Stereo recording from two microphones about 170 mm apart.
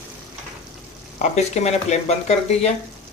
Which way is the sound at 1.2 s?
40° left (ahead or behind).